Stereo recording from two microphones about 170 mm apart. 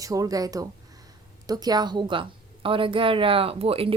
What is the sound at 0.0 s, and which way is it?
A woman's voice, 20° right (ahead or behind).